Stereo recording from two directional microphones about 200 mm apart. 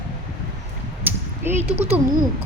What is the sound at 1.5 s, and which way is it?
Speech, 30° right (ahead or behind).